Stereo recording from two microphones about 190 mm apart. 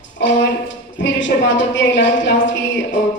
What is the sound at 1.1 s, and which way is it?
A woman's voice, 70° left (ahead or behind).